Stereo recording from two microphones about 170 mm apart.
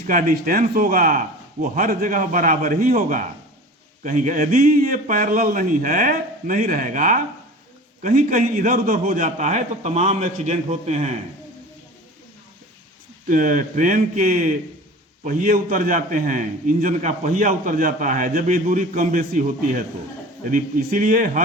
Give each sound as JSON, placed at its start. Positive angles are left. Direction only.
{"t": 0.0, "sound": "a man's voice", "side_deg": -55}
{"t": 13.2, "sound": "a man's voice", "side_deg": -50}